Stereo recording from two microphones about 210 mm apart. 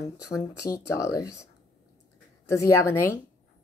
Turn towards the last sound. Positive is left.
turn(degrees=15)  # may be behind; listen again after turning